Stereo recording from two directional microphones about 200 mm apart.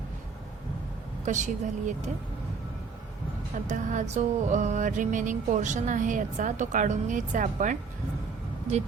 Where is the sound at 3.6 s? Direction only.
40° right (ahead or behind).